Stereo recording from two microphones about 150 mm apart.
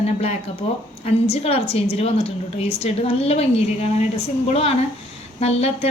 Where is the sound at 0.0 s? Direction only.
45° left (ahead or behind).